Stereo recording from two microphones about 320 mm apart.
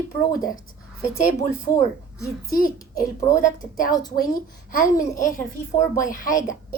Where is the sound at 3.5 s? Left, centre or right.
Left.